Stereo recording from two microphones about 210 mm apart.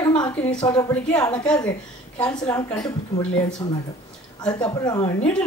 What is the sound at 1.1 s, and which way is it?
A woman's voice, 5° left (ahead or behind).